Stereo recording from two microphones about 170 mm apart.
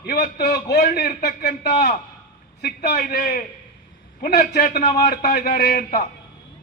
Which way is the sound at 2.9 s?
60° left (ahead or behind).